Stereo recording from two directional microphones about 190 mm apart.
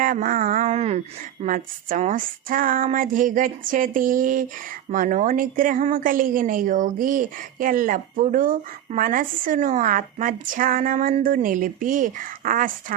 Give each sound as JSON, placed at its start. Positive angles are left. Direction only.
{"t": 0.0, "sound": "a woman's voice", "side_deg": -45}